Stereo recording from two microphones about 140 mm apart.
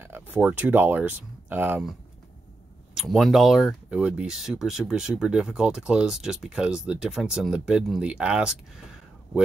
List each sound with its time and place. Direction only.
0.0 s speech: 15° right (ahead or behind)
2.9 s speech: centre (ahead or behind)